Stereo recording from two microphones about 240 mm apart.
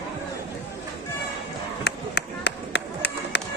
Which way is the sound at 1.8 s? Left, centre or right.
Left.